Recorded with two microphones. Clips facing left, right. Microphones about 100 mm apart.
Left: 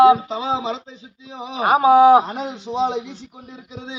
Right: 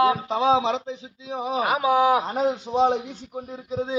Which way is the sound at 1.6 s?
40° left (ahead or behind).